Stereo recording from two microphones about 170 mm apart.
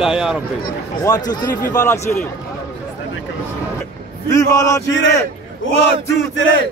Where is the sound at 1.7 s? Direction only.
15° left (ahead or behind).